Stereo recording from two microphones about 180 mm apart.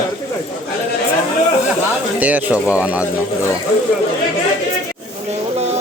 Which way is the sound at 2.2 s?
10° right (ahead or behind).